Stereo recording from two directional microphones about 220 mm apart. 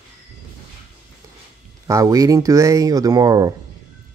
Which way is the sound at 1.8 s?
15° right (ahead or behind).